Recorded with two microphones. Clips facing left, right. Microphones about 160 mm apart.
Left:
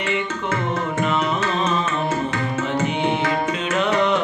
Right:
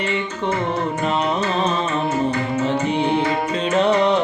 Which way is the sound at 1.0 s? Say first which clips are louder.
Right 1 dB; 35° right (ahead or behind).